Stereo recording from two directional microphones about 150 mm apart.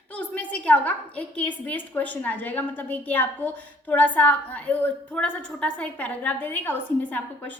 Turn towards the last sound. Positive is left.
turn(degrees=10)  # may be behind; listen again after turning